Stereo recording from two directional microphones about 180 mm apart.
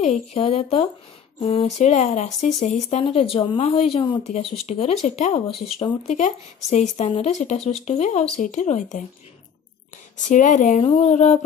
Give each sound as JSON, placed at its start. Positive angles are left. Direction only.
{"t": 0.0, "sound": "speech", "side_deg": 35}
{"t": 10.2, "sound": "speech", "side_deg": 45}
{"t": 10.8, "sound": "speech", "side_deg": 30}